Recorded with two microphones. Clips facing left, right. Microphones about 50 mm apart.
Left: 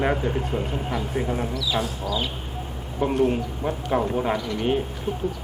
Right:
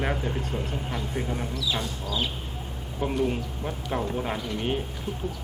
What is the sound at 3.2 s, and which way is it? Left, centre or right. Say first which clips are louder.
Speech: left 5 dB; centre.